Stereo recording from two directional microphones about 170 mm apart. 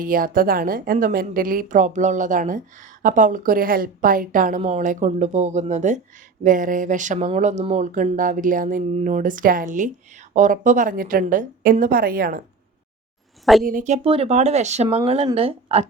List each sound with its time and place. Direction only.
0.0 s speech: 55° right (ahead or behind)
13.4 s a woman's voice: centre (ahead or behind)
13.7 s speech: 50° right (ahead or behind)